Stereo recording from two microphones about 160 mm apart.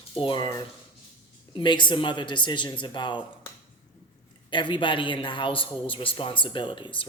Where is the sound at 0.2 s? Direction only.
30° left (ahead or behind).